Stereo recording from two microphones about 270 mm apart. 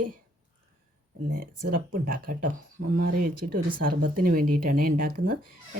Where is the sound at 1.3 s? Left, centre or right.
Right.